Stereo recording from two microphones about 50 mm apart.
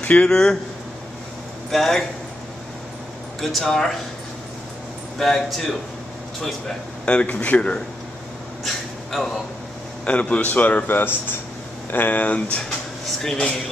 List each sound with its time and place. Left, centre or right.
0.2 s speech: centre
1.7 s a man's voice: centre
3.3 s speech: centre
5.2 s a man's voice: centre
7.1 s speech: left
10.0 s a man's voice: left